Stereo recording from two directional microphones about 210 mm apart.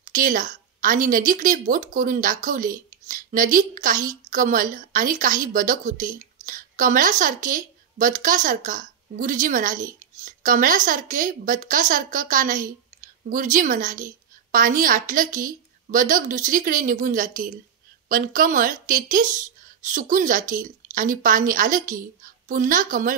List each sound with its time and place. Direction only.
0.0 s a woman's voice: 40° right (ahead or behind)